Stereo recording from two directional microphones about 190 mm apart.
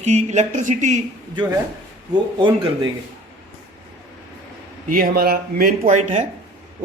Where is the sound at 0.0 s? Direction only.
35° right (ahead or behind).